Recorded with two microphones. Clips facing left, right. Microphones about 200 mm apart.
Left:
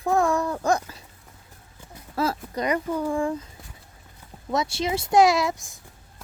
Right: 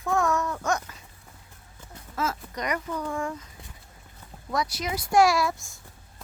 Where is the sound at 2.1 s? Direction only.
30° left (ahead or behind).